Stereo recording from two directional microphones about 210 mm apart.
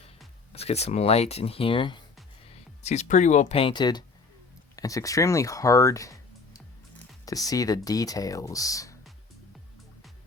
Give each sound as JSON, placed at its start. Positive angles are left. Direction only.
{"t": 0.5, "sound": "speech", "side_deg": 30}